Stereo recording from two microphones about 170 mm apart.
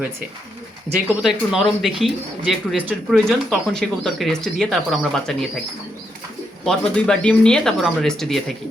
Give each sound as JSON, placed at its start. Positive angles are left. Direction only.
{"t": 1.2, "sound": "speech", "side_deg": 0}
{"t": 6.7, "sound": "speech", "side_deg": 5}